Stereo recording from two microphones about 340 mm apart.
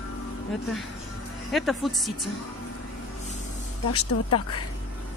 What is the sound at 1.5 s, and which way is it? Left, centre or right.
Speech, centre.